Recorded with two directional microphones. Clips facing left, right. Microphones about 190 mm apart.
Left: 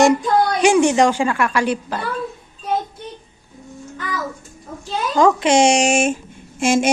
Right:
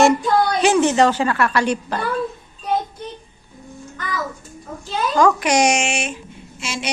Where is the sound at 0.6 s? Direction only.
15° left (ahead or behind).